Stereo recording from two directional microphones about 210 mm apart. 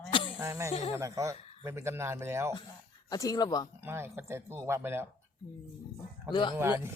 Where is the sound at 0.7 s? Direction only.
25° left (ahead or behind).